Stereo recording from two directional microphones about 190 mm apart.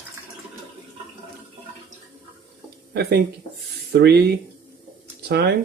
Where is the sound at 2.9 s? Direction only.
55° right (ahead or behind).